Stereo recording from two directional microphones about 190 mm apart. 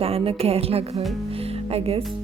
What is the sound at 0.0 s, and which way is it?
A woman's voice, 30° right (ahead or behind).